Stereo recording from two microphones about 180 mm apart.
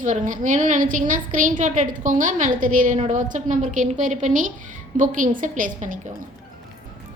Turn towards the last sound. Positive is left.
turn(degrees=-50)  # may be behind; listen again after turning